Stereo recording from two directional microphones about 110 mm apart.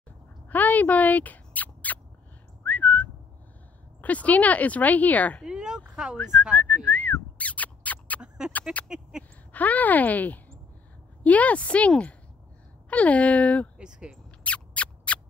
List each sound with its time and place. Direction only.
0.5 s bird: 15° left (ahead or behind)
2.6 s whistling: 15° left (ahead or behind)
4.0 s speech: 15° left (ahead or behind)
5.4 s speech: 5° right (ahead or behind)
6.1 s speech: 20° left (ahead or behind)
6.5 s a sound: 15° left (ahead or behind)
8.4 s speech: 5° right (ahead or behind)
9.5 s speech: 15° left (ahead or behind)
13.7 s speech: 10° right (ahead or behind)
14.4 s a sound: 10° left (ahead or behind)